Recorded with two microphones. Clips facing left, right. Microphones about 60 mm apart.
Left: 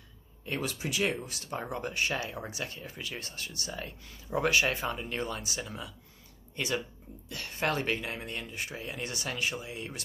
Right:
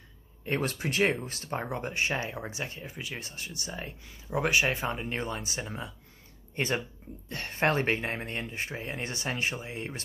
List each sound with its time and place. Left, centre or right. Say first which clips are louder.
0.5 s speech: right 4 dB; right